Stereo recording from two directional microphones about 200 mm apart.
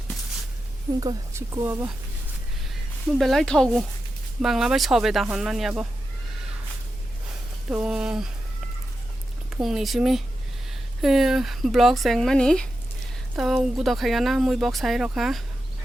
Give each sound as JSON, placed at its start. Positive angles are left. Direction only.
{"t": 0.9, "sound": "a woman's voice", "side_deg": -15}
{"t": 2.6, "sound": "speech", "side_deg": 0}
{"t": 7.7, "sound": "speech", "side_deg": -5}
{"t": 9.5, "sound": "speech", "side_deg": 0}